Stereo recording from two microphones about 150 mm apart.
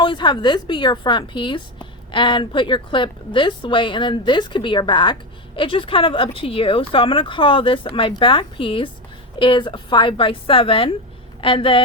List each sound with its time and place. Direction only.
0.0 s a woman's voice: 30° left (ahead or behind)